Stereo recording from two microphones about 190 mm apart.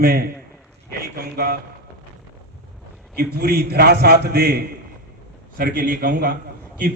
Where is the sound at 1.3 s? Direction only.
55° right (ahead or behind).